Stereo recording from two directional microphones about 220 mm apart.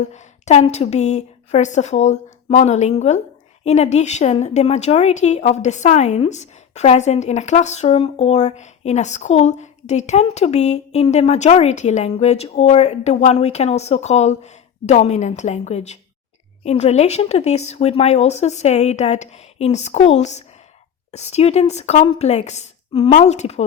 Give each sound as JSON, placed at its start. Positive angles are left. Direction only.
{"t": 0.0, "sound": "a woman's voice", "side_deg": 30}